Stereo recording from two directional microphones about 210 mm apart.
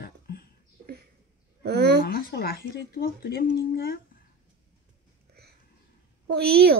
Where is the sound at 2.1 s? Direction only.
45° left (ahead or behind).